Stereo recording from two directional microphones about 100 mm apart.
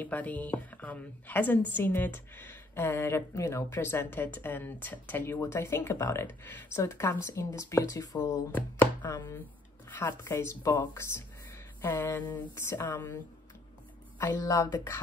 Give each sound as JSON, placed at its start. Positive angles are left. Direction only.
{"t": 0.0, "sound": "a woman's voice", "side_deg": 15}
{"t": 8.2, "sound": "a woman's voice", "side_deg": 20}